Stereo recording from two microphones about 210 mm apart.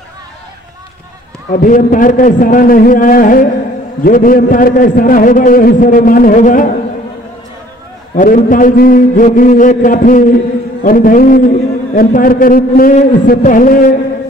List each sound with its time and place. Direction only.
1.6 s a man's voice: 40° left (ahead or behind)
8.2 s a man's voice: 40° left (ahead or behind)